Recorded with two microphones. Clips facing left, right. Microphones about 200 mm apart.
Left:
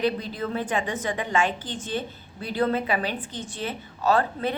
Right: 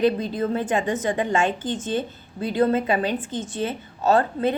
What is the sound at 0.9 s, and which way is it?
Speech, 25° right (ahead or behind).